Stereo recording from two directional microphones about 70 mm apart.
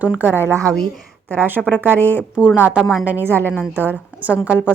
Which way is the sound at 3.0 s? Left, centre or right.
Right.